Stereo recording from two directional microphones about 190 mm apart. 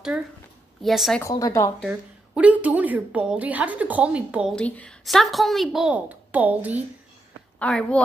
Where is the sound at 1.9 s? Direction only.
5° right (ahead or behind).